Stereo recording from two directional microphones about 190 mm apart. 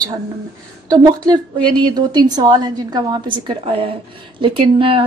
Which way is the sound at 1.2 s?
20° right (ahead or behind).